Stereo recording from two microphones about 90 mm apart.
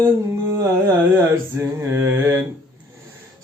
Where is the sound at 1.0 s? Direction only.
30° right (ahead or behind).